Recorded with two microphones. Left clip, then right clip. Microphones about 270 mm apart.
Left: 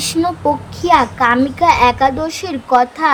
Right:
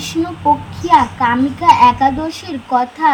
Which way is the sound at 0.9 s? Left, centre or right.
Centre.